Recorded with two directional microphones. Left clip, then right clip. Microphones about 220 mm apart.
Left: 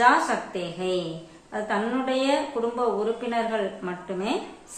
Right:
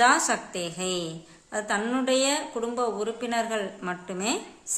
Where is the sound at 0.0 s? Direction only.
40° right (ahead or behind).